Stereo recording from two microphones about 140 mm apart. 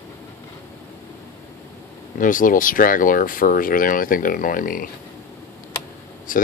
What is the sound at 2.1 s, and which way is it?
Speech, 70° left (ahead or behind).